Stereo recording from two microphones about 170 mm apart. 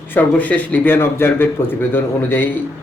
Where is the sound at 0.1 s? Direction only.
10° left (ahead or behind).